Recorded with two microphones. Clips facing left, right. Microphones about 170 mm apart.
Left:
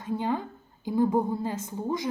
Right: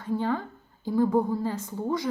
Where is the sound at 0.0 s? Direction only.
15° left (ahead or behind).